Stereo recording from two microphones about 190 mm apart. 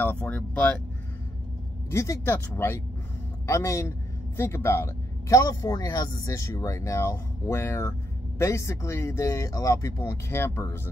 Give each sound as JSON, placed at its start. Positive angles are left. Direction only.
{"t": 0.0, "sound": "speech", "side_deg": 10}
{"t": 1.9, "sound": "speech", "side_deg": 15}